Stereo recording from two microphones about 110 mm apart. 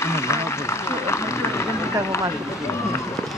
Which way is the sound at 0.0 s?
25° left (ahead or behind).